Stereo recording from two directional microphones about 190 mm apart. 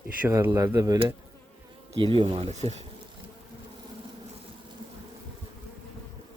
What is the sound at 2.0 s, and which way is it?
Speech, 25° right (ahead or behind).